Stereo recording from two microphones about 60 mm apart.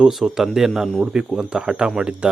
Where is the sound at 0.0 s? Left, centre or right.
Centre.